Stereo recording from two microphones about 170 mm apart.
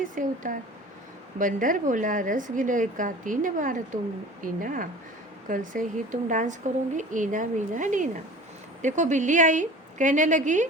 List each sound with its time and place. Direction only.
0.0 s speech: 50° right (ahead or behind)